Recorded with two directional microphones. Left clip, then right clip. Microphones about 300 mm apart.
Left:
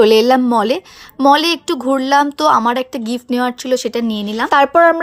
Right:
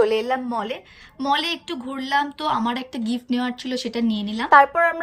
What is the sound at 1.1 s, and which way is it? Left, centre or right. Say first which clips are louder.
A woman's voice: left 11 dB; centre.